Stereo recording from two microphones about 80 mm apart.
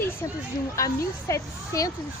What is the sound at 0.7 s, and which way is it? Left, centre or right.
A woman's voice, left.